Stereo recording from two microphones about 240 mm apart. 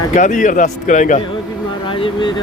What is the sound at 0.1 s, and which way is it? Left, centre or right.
A man's voice, left.